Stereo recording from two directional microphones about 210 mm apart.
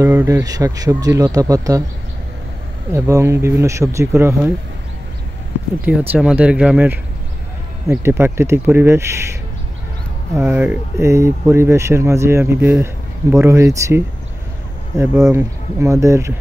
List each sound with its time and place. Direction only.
0.0 s speech: 10° right (ahead or behind)
2.9 s speech: 15° right (ahead or behind)
5.8 s speech: 5° right (ahead or behind)